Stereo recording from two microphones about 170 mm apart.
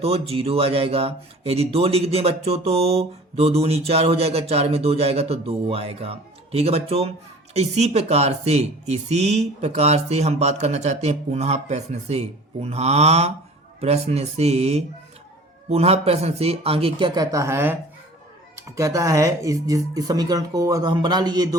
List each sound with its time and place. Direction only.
0.0 s speech: 35° right (ahead or behind)